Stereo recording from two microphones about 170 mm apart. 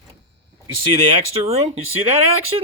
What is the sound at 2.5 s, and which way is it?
Speech, 30° right (ahead or behind).